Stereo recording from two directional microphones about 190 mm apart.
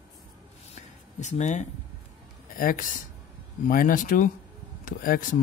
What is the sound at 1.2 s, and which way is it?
A man's voice, 40° left (ahead or behind).